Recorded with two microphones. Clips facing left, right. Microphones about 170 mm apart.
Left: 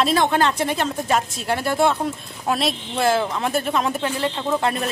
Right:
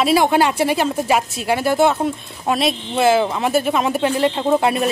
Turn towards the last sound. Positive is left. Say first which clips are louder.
# right 5 dB
turn(degrees=-10)  # may be behind; listen again after turning